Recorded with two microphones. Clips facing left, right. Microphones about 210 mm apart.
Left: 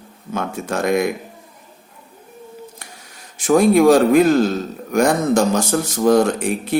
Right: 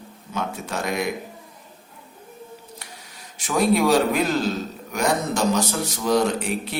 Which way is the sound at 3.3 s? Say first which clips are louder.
Left 7 dB; 50° left (ahead or behind).